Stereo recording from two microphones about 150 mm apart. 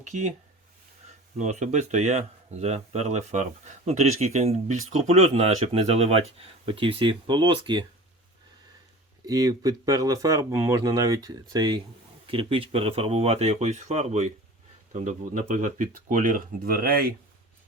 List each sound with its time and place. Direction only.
0.0 s speech: 50° right (ahead or behind)
1.4 s speech: 50° right (ahead or behind); by 7.9 s 30° right (ahead or behind)
9.2 s speech: 25° right (ahead or behind)
12.3 s speech: 35° right (ahead or behind); by 17.2 s 80° right